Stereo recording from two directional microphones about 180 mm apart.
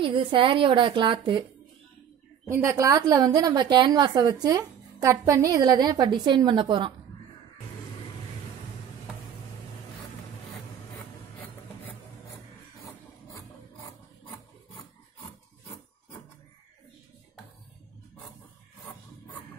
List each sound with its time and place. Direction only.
0.0 s a woman's voice: 25° right (ahead or behind)
2.5 s a woman's voice: 15° right (ahead or behind)